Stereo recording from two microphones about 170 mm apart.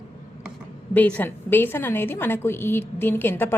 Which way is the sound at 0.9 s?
10° left (ahead or behind).